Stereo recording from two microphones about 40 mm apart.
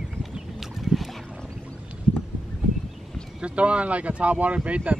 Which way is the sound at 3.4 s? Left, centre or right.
Right.